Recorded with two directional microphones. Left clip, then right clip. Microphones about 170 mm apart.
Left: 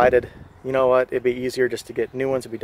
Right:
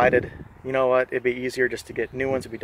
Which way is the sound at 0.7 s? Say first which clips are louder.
Left 3 dB; 20° left (ahead or behind).